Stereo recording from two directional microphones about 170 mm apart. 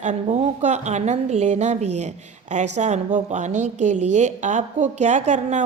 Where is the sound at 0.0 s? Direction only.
45° right (ahead or behind).